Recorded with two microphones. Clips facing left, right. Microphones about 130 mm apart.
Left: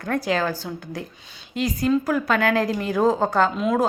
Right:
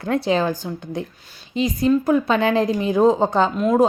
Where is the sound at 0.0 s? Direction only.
20° right (ahead or behind).